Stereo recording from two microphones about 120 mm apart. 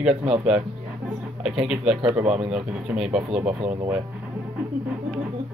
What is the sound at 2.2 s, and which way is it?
Speech, 65° right (ahead or behind).